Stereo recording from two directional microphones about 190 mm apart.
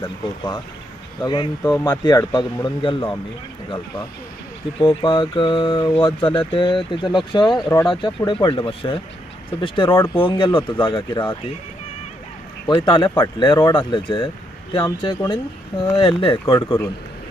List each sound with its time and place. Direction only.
0.0 s speech: 20° left (ahead or behind)
4.7 s speech: 25° left (ahead or behind)
12.6 s speech: 25° left (ahead or behind)